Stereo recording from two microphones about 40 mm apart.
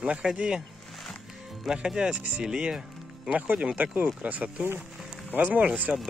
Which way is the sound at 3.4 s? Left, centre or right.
Right.